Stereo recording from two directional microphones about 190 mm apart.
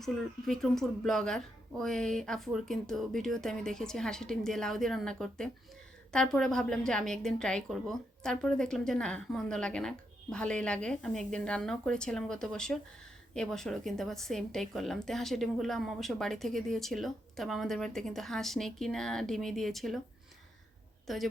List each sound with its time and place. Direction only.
0.0 s a woman's voice: centre (ahead or behind)
21.1 s a woman's voice: centre (ahead or behind)